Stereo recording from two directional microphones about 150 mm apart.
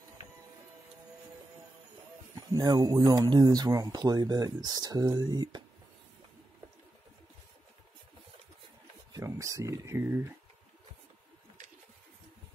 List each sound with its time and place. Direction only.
2.3 s speech: 25° right (ahead or behind)
9.1 s speech: 20° right (ahead or behind)